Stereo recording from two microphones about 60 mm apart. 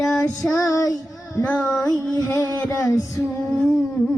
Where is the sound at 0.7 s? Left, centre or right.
Left.